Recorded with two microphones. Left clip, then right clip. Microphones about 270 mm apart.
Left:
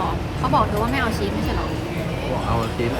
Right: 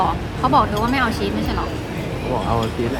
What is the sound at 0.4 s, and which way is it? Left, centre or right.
Speech, centre.